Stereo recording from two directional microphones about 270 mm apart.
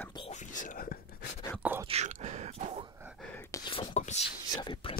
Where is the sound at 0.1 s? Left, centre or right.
Left.